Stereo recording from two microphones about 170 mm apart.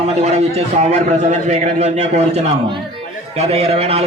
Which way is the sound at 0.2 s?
40° right (ahead or behind).